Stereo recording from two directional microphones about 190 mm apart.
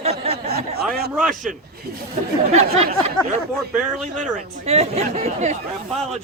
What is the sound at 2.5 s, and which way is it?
Speech, 35° right (ahead or behind).